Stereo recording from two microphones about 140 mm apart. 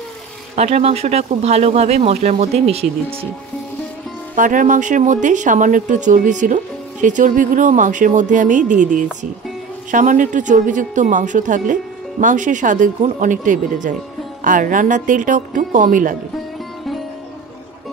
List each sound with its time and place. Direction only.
0.6 s speech: 50° right (ahead or behind)
4.4 s speech: 70° right (ahead or behind)